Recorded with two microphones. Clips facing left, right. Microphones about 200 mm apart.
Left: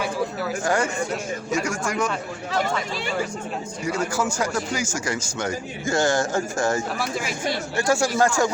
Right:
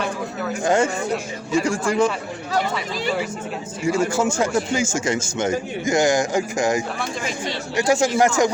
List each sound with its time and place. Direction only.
0.6 s a man's voice: 20° right (ahead or behind)
3.8 s a man's voice: 25° right (ahead or behind)
7.0 s speech: 10° left (ahead or behind)
7.8 s a man's voice: 20° right (ahead or behind)